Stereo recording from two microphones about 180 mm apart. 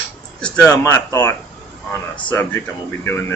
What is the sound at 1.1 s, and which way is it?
Speech, 15° left (ahead or behind).